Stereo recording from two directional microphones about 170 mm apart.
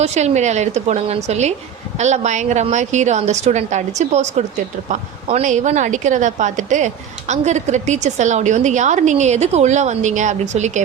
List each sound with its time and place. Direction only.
0.0 s a woman's voice: 40° right (ahead or behind)